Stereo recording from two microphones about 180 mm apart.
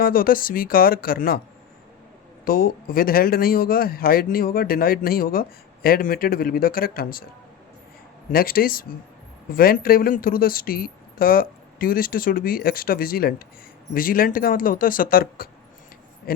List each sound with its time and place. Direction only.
0.0 s speech: 50° left (ahead or behind)
2.4 s speech: 55° left (ahead or behind)
8.3 s speech: 55° left (ahead or behind)